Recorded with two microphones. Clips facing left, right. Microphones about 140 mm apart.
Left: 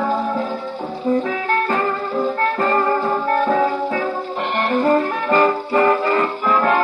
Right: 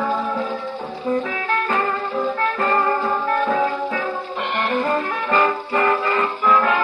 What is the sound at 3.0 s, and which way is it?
Music, 25° left (ahead or behind).